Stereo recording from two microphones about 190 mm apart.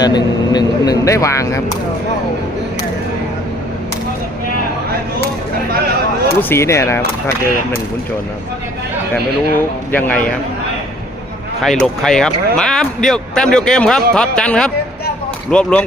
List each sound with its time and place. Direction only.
0.0 s speech: 20° left (ahead or behind)
6.5 s speech: 15° left (ahead or behind)
9.9 s speech: 10° left (ahead or behind)
11.6 s speech: centre (ahead or behind)